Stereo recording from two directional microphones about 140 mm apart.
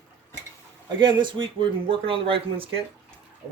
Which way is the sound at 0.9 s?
35° right (ahead or behind).